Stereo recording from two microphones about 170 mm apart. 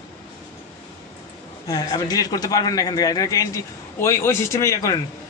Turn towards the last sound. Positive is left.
turn(degrees=20)  # may be behind; listen again after turning